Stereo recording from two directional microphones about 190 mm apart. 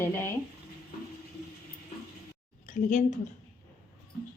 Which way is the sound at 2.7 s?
45° left (ahead or behind).